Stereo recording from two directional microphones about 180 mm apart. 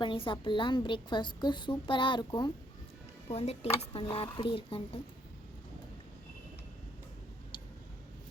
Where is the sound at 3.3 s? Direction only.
35° left (ahead or behind).